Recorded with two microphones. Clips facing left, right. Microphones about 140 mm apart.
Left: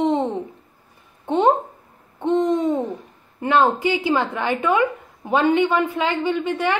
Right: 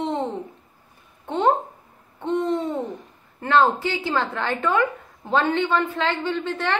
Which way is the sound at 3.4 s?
15° left (ahead or behind).